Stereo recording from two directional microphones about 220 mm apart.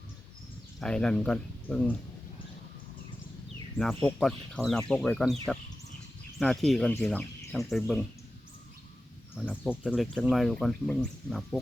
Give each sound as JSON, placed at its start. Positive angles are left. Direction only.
{"t": 0.8, "sound": "speech", "side_deg": 5}
{"t": 3.8, "sound": "speech", "side_deg": 0}
{"t": 9.3, "sound": "speech", "side_deg": -5}